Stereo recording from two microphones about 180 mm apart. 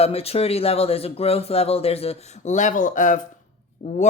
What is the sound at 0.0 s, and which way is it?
Speech, 35° left (ahead or behind).